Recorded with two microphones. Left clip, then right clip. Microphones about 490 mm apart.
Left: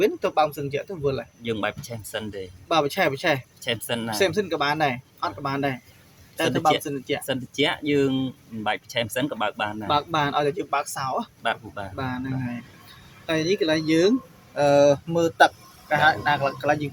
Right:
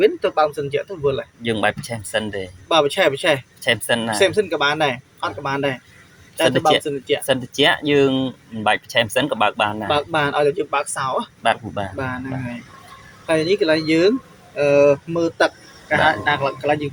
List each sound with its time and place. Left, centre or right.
0.0 s speech: left
1.5 s speech: left
2.7 s speech: left
3.6 s speech: left
4.2 s speech: left
7.3 s speech: left
9.8 s speech: left
11.4 s speech: left
11.9 s speech: left
13.2 s speech: left
14.5 s speech: left